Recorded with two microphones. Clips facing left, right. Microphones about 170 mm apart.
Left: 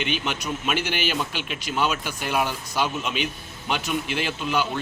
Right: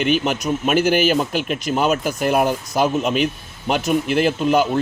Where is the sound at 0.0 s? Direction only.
45° right (ahead or behind).